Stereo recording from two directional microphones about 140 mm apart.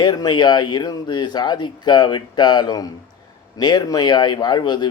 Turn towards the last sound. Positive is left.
turn(degrees=30)  # may be behind; listen again after turning